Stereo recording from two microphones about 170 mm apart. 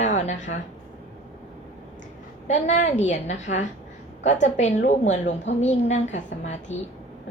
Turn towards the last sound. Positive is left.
turn(degrees=45)  # may be behind; listen again after turning